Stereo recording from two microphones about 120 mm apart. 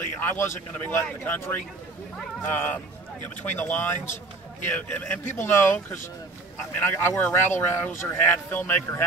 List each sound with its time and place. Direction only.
0.2 s speech: 15° left (ahead or behind)